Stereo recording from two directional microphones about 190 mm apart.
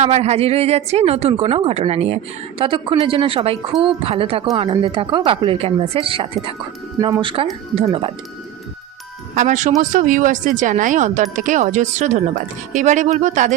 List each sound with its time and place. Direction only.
0.0 s a woman's voice: 35° right (ahead or behind)
9.3 s a woman's voice: 40° right (ahead or behind)